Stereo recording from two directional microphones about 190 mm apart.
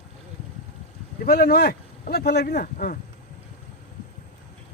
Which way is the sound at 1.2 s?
55° left (ahead or behind).